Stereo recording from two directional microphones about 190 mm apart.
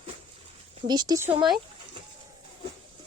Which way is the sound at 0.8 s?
20° right (ahead or behind).